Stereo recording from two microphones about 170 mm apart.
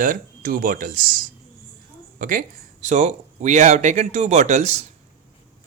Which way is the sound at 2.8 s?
45° right (ahead or behind).